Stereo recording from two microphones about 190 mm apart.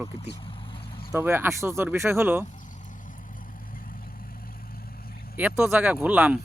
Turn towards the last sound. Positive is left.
turn(degrees=-10)  # may be behind; listen again after turning